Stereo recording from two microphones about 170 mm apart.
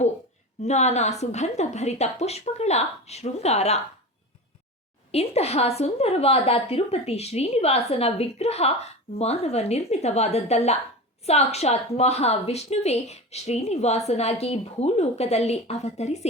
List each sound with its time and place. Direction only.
0.6 s a woman's voice: 40° left (ahead or behind)
5.1 s a woman's voice: 40° left (ahead or behind)